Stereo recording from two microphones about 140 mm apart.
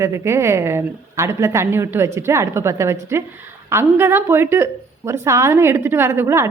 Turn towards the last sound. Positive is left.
turn(degrees=-20)  # may be behind; listen again after turning